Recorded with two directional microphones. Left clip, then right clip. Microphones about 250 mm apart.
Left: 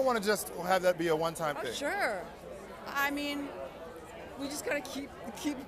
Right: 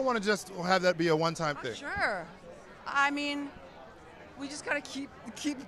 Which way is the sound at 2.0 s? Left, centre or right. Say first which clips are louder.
Right 1 dB; right.